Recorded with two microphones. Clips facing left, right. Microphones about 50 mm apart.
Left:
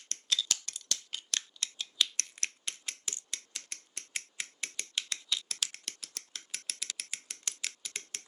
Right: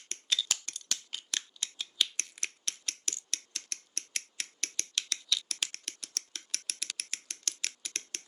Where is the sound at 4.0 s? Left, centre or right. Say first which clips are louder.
Left 1 dB; centre.